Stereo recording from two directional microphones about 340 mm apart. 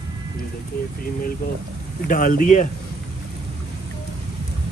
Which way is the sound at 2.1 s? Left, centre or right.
Left.